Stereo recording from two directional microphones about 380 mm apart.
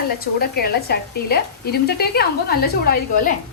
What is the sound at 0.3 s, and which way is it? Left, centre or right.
A woman's voice, left.